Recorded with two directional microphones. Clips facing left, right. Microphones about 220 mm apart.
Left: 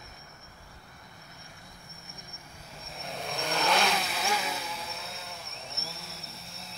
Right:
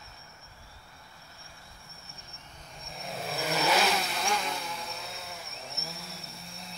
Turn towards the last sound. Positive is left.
turn(degrees=0)  # may be behind; listen again after turning